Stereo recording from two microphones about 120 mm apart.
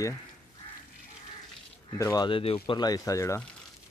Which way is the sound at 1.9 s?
25° left (ahead or behind).